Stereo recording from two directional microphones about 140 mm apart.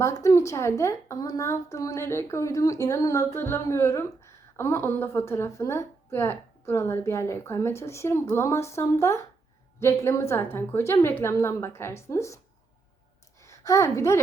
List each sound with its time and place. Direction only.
0.0 s a woman's voice: 20° left (ahead or behind)
13.4 s a woman's voice: 20° left (ahead or behind)